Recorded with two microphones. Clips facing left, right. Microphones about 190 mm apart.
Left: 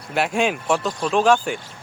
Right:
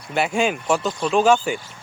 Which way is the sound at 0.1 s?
Centre (ahead or behind).